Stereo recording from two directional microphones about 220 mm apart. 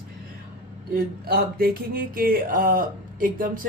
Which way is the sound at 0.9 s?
45° right (ahead or behind).